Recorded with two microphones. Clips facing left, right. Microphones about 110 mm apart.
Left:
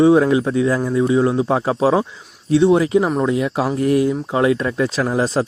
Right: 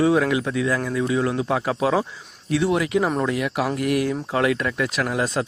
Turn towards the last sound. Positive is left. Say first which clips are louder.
# left 5 dB
turn(degrees=30)  # may be behind; listen again after turning